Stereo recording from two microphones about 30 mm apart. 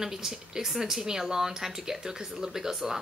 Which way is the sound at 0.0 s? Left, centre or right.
Centre.